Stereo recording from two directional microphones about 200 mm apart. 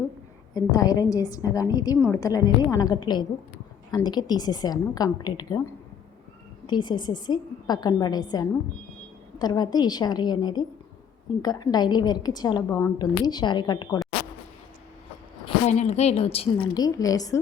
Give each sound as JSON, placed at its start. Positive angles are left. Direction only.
{"t": 0.5, "sound": "a woman's voice", "side_deg": 20}
{"t": 6.7, "sound": "a woman's voice", "side_deg": 20}
{"t": 15.4, "sound": "a woman's voice", "side_deg": 35}